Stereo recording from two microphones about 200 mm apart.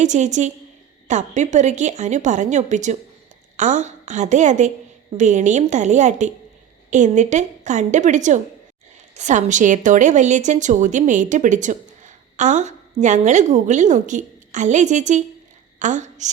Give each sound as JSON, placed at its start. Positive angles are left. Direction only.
{"t": 0.0, "sound": "a woman's voice", "side_deg": -35}